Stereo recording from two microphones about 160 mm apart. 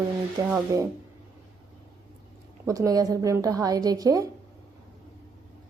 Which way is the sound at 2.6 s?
20° right (ahead or behind).